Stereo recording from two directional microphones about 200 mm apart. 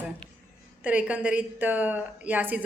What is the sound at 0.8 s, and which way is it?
A woman's voice, 5° right (ahead or behind).